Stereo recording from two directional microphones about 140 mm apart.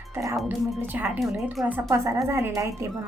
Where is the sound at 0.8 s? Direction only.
15° right (ahead or behind).